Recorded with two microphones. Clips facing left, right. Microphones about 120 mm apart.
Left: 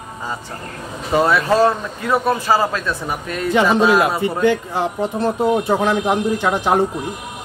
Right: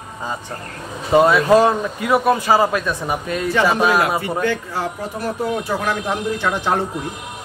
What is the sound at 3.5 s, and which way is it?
Speech, 20° left (ahead or behind).